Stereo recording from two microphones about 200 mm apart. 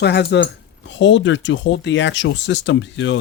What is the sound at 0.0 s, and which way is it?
Speech, 55° left (ahead or behind).